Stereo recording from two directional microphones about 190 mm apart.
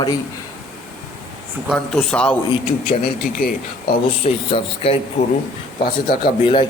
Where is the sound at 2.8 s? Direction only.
50° left (ahead or behind).